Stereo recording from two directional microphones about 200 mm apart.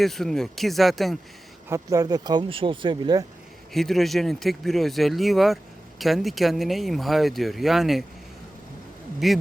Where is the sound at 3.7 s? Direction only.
Centre (ahead or behind).